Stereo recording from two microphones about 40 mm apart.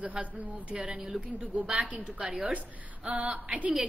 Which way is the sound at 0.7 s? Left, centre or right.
Centre.